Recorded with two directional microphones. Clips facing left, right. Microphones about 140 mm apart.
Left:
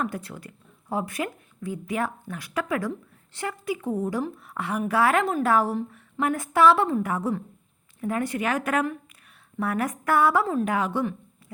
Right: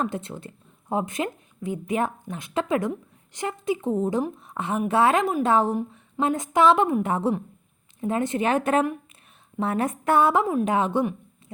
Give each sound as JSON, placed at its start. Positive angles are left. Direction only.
{"t": 0.0, "sound": "speech", "side_deg": -25}